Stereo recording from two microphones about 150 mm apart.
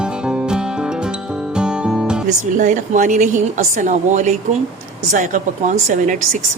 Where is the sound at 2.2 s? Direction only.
55° right (ahead or behind).